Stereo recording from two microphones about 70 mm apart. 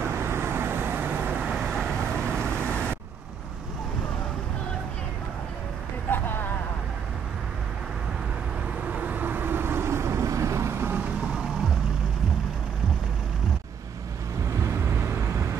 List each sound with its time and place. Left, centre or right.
0.0 s vehicle: right
1.7 s vehicle: centre
6.0 s vehicle: left
8.8 s vehicle: right
14.6 s vehicle: right